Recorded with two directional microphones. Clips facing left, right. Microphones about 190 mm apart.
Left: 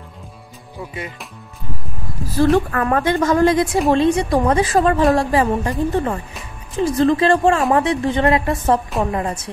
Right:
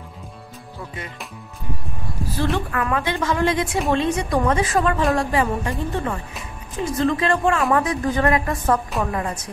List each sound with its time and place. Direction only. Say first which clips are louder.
2.5 s a woman's voice: left 6 dB; 40° left (ahead or behind)